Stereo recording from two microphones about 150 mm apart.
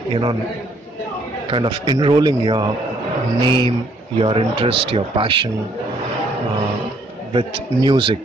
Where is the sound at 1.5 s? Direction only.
35° right (ahead or behind).